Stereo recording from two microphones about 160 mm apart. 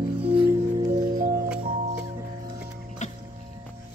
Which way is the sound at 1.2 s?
60° right (ahead or behind).